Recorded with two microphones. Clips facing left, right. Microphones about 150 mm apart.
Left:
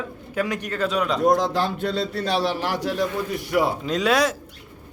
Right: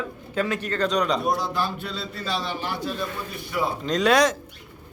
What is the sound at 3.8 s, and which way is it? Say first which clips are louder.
Speech: right 1 dB; 5° left (ahead or behind).